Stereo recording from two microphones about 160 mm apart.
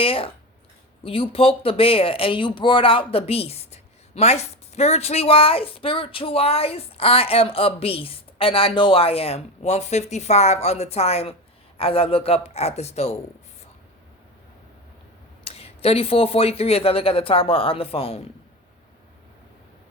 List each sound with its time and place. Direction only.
0.0 s speech: 35° left (ahead or behind)
15.4 s speech: 40° left (ahead or behind)